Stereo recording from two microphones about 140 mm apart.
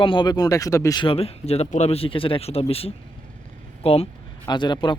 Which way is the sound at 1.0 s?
45° left (ahead or behind).